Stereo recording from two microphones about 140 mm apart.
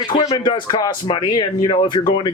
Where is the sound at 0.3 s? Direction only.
30° left (ahead or behind).